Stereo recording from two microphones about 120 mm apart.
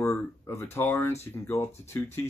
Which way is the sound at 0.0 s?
25° left (ahead or behind).